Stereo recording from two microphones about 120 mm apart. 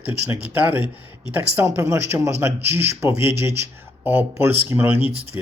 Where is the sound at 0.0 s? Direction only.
15° right (ahead or behind).